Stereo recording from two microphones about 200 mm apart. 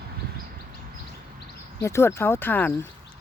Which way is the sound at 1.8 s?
15° left (ahead or behind).